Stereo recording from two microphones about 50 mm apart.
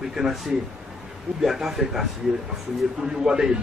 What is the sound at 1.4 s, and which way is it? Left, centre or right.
Speech, centre.